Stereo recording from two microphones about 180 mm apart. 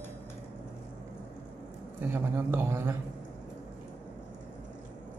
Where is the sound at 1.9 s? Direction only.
10° right (ahead or behind).